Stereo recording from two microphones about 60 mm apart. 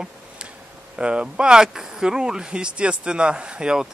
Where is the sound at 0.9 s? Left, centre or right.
Centre.